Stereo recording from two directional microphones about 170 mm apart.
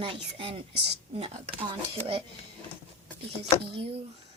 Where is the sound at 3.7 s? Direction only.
35° right (ahead or behind).